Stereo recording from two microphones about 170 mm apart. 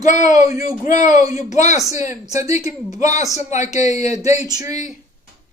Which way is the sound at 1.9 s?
20° right (ahead or behind).